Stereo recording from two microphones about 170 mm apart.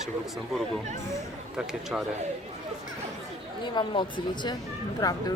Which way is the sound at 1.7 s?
5° right (ahead or behind).